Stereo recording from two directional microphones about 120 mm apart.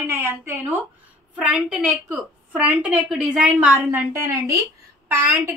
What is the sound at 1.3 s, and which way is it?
A woman's voice, 10° right (ahead or behind).